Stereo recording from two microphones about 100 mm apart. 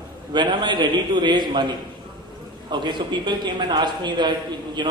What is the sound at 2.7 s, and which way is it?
A man's voice, 50° right (ahead or behind).